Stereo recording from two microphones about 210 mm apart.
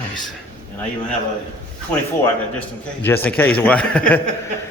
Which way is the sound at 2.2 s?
10° left (ahead or behind).